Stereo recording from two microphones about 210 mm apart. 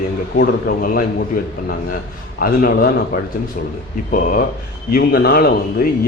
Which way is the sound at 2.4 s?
45° left (ahead or behind).